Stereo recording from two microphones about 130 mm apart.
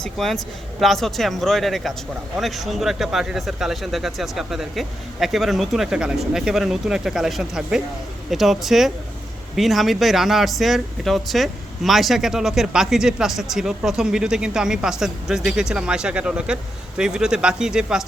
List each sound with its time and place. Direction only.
0.0 s speech: centre (ahead or behind)